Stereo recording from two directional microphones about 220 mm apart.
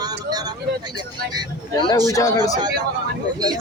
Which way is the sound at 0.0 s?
20° right (ahead or behind).